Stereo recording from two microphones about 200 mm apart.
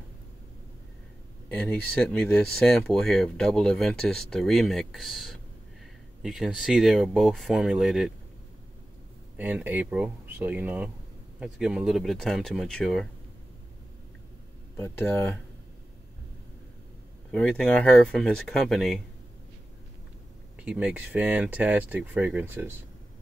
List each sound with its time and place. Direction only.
1.5 s speech: 5° left (ahead or behind)
9.4 s speech: 10° right (ahead or behind)
14.8 s speech: 10° left (ahead or behind)
17.3 s speech: 5° left (ahead or behind)
20.6 s speech: 5° right (ahead or behind)